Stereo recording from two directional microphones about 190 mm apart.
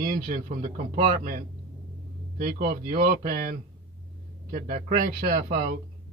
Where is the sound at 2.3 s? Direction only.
50° right (ahead or behind).